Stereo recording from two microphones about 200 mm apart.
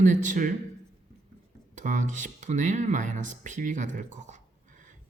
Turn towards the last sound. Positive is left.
turn(degrees=-40)  # may be behind; listen again after turning